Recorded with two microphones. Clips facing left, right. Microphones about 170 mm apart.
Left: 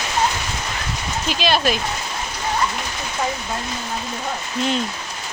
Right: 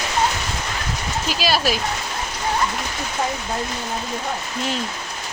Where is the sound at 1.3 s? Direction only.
5° right (ahead or behind).